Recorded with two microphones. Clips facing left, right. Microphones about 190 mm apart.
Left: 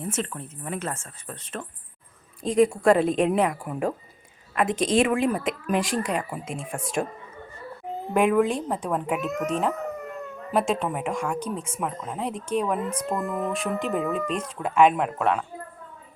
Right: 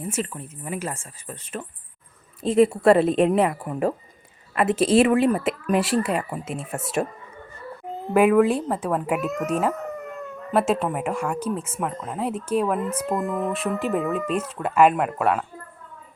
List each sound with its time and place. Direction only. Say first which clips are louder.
0.0 s speech: right 1 dB; 5° right (ahead or behind)
8.1 s speech: right 4 dB; 5° right (ahead or behind)